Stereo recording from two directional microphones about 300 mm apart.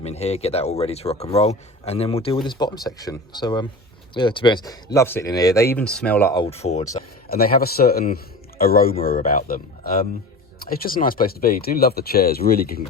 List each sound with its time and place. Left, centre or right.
0.0 s a man's voice: left